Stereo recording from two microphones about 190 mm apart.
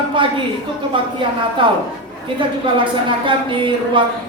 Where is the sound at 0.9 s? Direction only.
25° right (ahead or behind).